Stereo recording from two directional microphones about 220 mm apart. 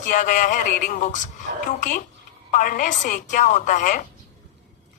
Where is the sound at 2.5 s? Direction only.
35° left (ahead or behind).